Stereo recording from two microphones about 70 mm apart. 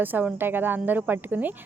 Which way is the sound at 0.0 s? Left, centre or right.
Right.